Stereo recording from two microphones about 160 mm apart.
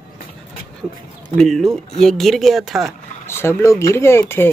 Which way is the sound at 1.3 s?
Centre (ahead or behind).